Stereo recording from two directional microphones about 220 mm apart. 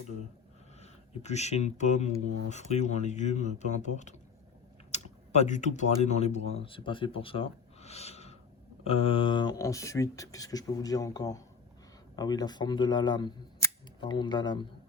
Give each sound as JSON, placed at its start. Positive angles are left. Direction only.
{"t": 0.8, "sound": "speech", "side_deg": 30}